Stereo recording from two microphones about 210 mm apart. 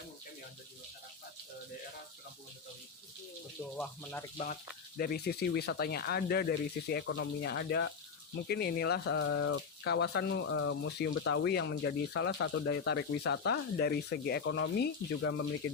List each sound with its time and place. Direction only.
3.8 s speech: 10° left (ahead or behind)
4.9 s speech: 45° left (ahead or behind)
10.4 s speech: 75° left (ahead or behind)
11.2 s speech: 60° left (ahead or behind)
15.2 s speech: 65° left (ahead or behind)